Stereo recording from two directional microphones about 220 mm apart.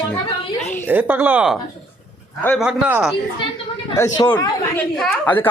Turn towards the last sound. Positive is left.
turn(degrees=5)  # may be behind; listen again after turning